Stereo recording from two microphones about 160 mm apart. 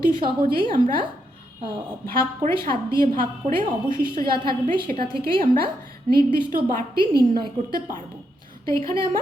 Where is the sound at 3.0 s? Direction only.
55° right (ahead or behind).